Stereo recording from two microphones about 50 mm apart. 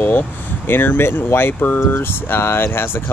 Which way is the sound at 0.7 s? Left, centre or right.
Left.